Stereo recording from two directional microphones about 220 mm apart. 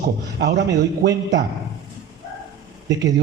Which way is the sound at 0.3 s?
50° right (ahead or behind).